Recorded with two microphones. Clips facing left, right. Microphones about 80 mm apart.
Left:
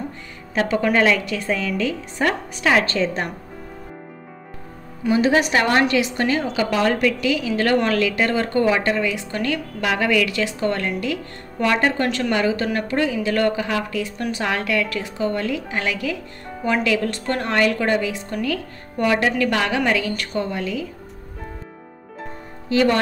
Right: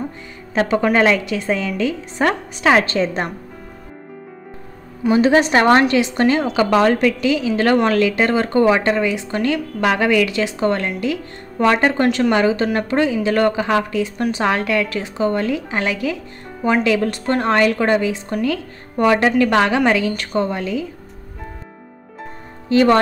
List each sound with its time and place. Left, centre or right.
0.6 s speech: right
5.1 s a woman's voice: right
22.7 s a woman's voice: right